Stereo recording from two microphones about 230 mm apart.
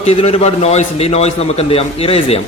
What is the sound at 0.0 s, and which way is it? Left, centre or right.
A man's voice, left.